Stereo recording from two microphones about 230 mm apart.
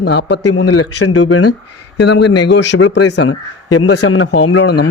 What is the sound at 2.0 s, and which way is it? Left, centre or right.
A man's voice, left.